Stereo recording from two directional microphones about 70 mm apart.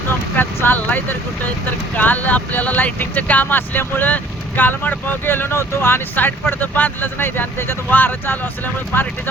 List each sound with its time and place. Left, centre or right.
0.3 s speech: left